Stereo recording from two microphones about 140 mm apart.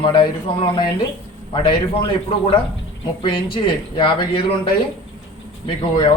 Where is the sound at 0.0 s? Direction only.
40° left (ahead or behind).